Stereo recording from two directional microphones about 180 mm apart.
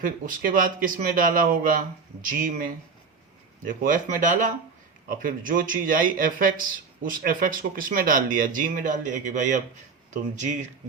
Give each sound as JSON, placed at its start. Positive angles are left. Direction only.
{"t": 0.0, "sound": "speech", "side_deg": -50}